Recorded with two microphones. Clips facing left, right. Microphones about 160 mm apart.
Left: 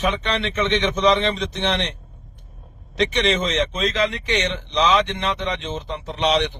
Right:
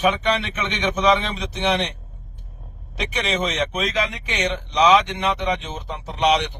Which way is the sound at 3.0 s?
10° right (ahead or behind).